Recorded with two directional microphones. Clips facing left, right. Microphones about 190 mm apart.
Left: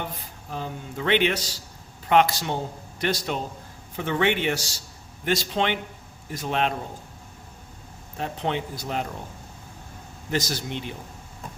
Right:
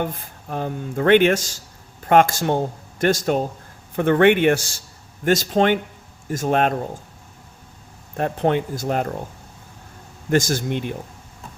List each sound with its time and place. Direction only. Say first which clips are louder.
0.0 s speech: right 8 dB; 50° right (ahead or behind)
8.1 s speech: right 8 dB; 55° right (ahead or behind)
10.3 s speech: right 8 dB; 50° right (ahead or behind)